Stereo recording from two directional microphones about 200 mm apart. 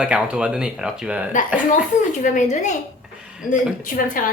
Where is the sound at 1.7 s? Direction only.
40° left (ahead or behind).